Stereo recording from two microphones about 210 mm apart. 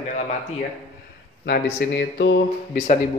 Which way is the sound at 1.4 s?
50° left (ahead or behind).